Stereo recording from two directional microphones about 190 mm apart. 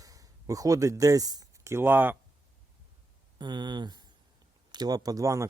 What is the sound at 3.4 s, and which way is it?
Speech, 25° right (ahead or behind).